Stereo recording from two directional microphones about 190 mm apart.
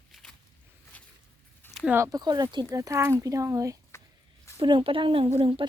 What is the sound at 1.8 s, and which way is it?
Speech, 10° right (ahead or behind).